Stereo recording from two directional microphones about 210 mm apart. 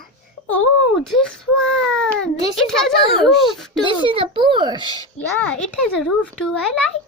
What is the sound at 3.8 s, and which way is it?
Speech, 25° right (ahead or behind).